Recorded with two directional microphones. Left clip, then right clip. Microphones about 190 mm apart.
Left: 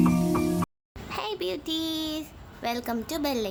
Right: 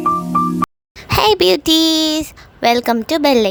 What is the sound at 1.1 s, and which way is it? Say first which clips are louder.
A woman's voice: right 19 dB; 55° right (ahead or behind).